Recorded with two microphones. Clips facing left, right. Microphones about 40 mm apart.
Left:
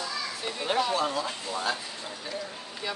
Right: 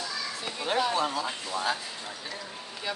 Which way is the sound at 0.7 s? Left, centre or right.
Centre.